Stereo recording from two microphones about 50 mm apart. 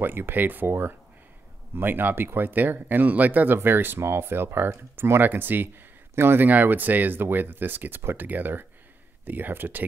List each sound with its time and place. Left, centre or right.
0.0 s speech: right
5.2 s speech: right
6.5 s speech: right